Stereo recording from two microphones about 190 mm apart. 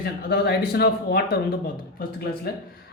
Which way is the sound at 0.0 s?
55° left (ahead or behind).